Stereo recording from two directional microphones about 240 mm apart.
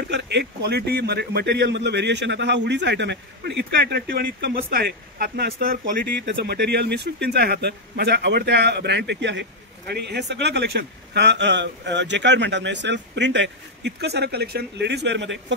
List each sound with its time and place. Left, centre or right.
0.1 s a man's voice: right